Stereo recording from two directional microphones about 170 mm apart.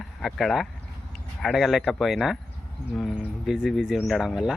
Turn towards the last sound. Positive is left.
turn(degrees=-5)  # may be behind; listen again after turning